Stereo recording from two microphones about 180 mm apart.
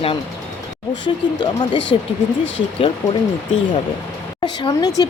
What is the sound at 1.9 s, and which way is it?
Speech, 25° left (ahead or behind).